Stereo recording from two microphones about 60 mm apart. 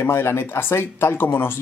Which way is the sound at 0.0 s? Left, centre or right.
Left.